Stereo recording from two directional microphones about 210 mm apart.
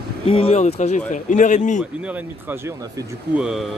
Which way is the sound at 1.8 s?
5° right (ahead or behind).